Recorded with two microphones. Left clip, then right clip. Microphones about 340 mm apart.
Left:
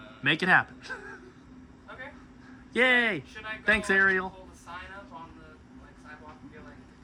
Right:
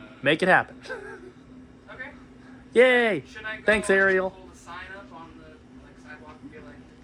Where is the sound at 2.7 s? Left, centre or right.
Centre.